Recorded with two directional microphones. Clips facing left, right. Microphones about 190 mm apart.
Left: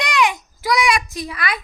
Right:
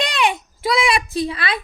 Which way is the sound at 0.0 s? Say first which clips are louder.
Left 1 dB; 30° right (ahead or behind).